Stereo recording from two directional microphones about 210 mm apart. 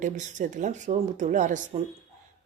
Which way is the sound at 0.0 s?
35° right (ahead or behind).